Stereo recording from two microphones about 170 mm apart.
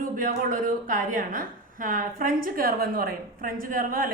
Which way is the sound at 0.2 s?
55° right (ahead or behind).